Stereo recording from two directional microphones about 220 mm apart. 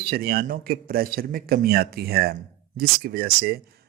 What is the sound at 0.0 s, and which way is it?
A man's voice, 45° right (ahead or behind).